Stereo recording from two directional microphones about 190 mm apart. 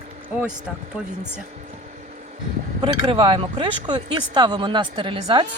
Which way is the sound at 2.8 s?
25° right (ahead or behind).